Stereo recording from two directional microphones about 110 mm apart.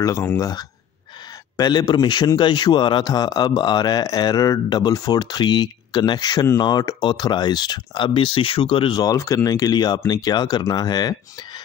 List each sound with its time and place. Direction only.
0.0 s a man's voice: 25° left (ahead or behind); by 9.0 s 50° left (ahead or behind)
9.0 s a man's voice: 30° left (ahead or behind)